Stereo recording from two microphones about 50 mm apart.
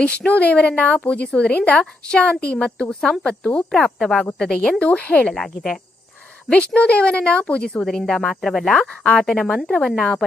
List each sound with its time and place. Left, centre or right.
0.0 s a woman's voice: left
4.8 s a woman's voice: left
5.3 s speech: centre
6.5 s a woman's voice: left
7.9 s speech: centre
8.7 s speech: centre